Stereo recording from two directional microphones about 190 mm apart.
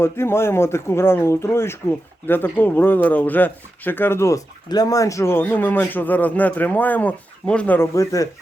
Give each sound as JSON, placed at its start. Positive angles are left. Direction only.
{"t": 0.0, "sound": "speech", "side_deg": 15}